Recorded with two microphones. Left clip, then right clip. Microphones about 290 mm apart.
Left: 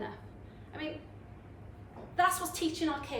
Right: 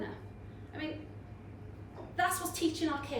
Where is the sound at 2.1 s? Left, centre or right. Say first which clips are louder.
Left 3 dB; centre.